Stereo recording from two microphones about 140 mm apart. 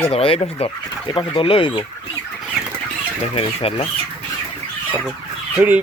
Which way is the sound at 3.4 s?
45° left (ahead or behind).